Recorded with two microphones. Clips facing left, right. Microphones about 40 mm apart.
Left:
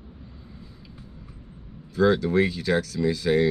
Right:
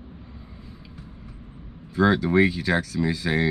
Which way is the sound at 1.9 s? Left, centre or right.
Centre.